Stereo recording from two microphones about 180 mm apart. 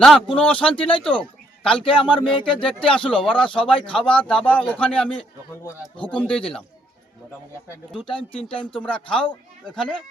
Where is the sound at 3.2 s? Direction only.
25° left (ahead or behind).